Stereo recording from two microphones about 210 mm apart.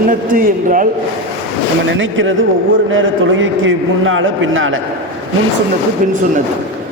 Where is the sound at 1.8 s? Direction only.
65° right (ahead or behind).